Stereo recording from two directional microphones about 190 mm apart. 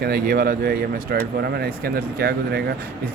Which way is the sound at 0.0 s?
55° right (ahead or behind).